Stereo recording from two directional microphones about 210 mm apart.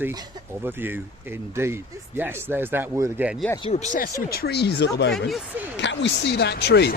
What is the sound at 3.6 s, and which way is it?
Speech, 30° left (ahead or behind).